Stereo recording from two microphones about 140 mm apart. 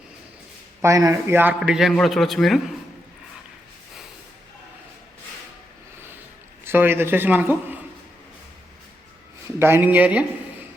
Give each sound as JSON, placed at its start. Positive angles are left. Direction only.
{"t": 0.8, "sound": "speech", "side_deg": -25}
{"t": 1.5, "sound": "a man's voice", "side_deg": -5}
{"t": 6.7, "sound": "a man's voice", "side_deg": -15}
{"t": 9.6, "sound": "a man's voice", "side_deg": -15}